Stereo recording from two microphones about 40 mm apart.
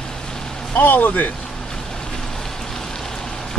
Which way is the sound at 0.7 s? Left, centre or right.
Left.